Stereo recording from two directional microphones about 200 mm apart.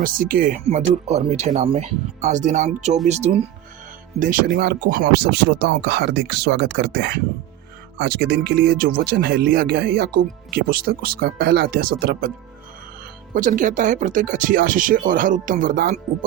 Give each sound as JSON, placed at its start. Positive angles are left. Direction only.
{"t": 0.0, "sound": "speech", "side_deg": -45}
{"t": 0.6, "sound": "speech", "side_deg": -30}
{"t": 13.3, "sound": "speech", "side_deg": -40}